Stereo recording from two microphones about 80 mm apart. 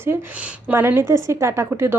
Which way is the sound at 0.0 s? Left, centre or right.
Right.